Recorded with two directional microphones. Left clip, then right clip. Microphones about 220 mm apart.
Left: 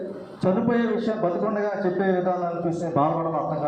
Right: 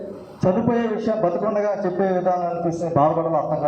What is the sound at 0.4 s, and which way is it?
A man's voice, 40° right (ahead or behind).